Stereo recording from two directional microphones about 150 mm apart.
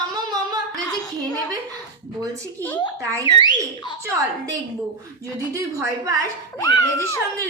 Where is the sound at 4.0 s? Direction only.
25° right (ahead or behind).